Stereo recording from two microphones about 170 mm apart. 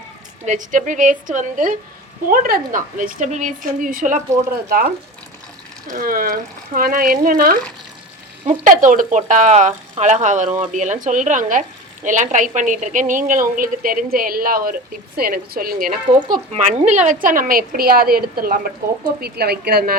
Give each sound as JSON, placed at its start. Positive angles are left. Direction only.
{"t": 0.4, "sound": "a woman's voice", "side_deg": -50}
{"t": 4.5, "sound": "speech", "side_deg": -60}
{"t": 5.9, "sound": "a woman's voice", "side_deg": -55}
{"t": 16.3, "sound": "a woman's voice", "side_deg": -40}
{"t": 19.2, "sound": "speech", "side_deg": -70}